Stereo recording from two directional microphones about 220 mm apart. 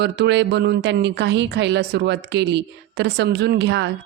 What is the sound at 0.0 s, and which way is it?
A woman's voice, 50° right (ahead or behind).